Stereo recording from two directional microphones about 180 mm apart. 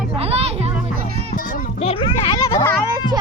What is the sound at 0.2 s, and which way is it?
Music, 35° right (ahead or behind).